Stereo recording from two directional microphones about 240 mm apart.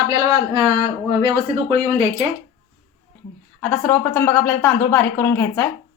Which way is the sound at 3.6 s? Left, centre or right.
Centre.